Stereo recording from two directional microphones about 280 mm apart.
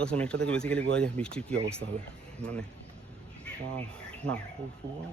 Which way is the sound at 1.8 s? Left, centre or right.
Right.